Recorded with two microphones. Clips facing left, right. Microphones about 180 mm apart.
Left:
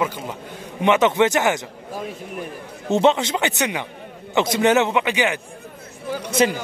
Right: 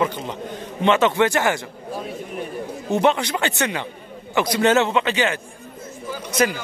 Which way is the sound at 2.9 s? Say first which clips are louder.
Left 2 dB; 20° left (ahead or behind).